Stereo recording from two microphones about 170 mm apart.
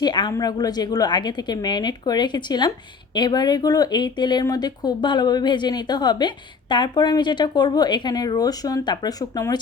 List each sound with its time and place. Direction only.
0.0 s speech: 25° left (ahead or behind)